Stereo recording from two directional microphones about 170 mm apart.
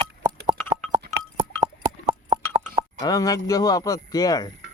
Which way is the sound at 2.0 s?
35° right (ahead or behind).